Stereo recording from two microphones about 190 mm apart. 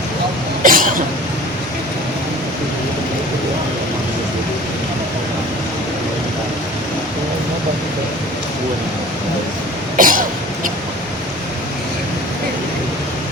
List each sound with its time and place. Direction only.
0.6 s cough: 45° right (ahead or behind)
10.0 s cough: 45° right (ahead or behind)